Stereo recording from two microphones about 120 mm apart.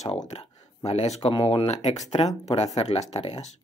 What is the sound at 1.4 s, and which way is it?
Speech, 50° left (ahead or behind).